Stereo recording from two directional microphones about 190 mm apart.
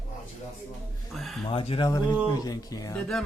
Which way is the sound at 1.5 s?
30° left (ahead or behind).